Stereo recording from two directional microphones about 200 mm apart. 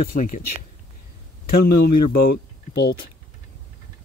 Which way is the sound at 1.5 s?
50° left (ahead or behind).